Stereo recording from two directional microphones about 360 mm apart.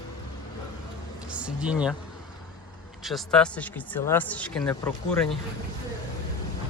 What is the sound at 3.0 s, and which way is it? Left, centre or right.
Speech, centre.